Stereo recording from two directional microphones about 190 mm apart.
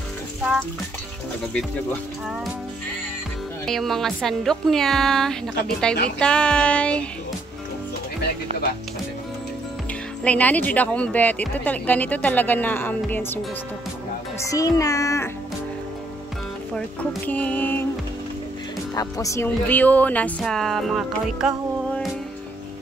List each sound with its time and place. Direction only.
3.6 s speech: centre (ahead or behind)
10.2 s speech: 10° left (ahead or behind)
14.4 s speech: 15° left (ahead or behind)
17.3 s speech: 10° left (ahead or behind)
18.9 s speech: 15° left (ahead or behind); by 22.1 s centre (ahead or behind)